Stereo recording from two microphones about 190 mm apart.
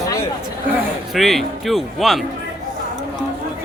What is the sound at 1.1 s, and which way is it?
Speech, centre (ahead or behind).